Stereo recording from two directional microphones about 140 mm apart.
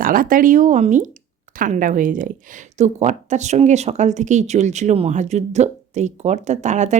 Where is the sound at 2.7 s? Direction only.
55° right (ahead or behind).